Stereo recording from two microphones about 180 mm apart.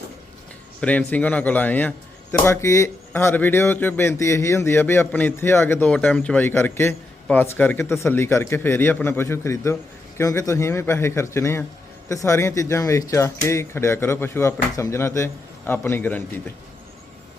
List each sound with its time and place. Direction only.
0.8 s speech: 10° left (ahead or behind)